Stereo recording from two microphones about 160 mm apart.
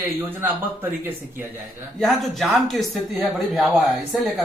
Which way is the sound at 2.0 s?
Centre (ahead or behind).